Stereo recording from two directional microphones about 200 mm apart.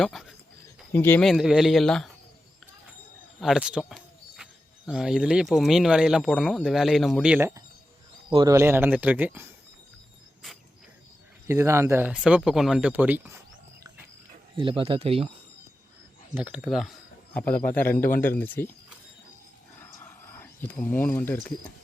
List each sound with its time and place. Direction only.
0.0 s speech: centre (ahead or behind)
3.4 s a sound: 5° right (ahead or behind)
4.9 s speech: 5° right (ahead or behind)
11.4 s speech: 15° right (ahead or behind)
14.5 s speech: 25° right (ahead or behind)
16.3 s speech: 5° right (ahead or behind)
19.8 s a sound: 10° left (ahead or behind)